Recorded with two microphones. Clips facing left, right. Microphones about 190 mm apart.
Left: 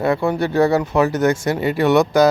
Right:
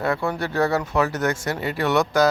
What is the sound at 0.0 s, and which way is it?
Speech, 15° left (ahead or behind).